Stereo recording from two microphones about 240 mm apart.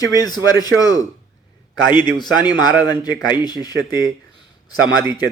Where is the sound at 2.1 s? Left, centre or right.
Centre.